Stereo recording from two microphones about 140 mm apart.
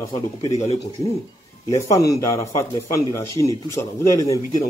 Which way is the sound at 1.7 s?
25° left (ahead or behind).